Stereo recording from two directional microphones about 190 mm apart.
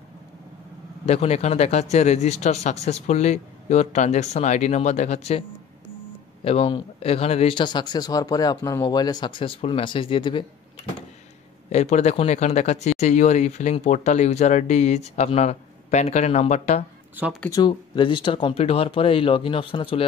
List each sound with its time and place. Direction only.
1.0 s speech: 35° left (ahead or behind)
6.4 s a man's voice: 30° left (ahead or behind)
11.7 s speech: 35° left (ahead or behind)
17.1 s speech: 10° right (ahead or behind)
17.5 s a man's voice: 20° left (ahead or behind)